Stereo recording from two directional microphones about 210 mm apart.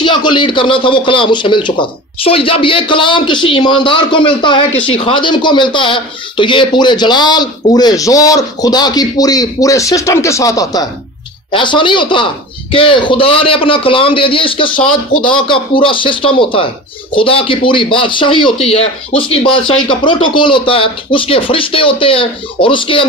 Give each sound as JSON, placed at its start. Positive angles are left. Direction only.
{"t": 0.0, "sound": "a man's voice", "side_deg": 20}